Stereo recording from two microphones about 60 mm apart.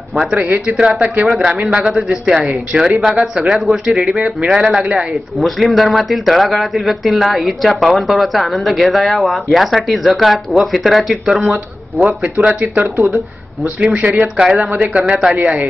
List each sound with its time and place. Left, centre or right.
0.3 s a man's voice: centre
4.4 s a man's voice: centre
5.1 s speech: centre
12.2 s a man's voice: centre
14.1 s a man's voice: centre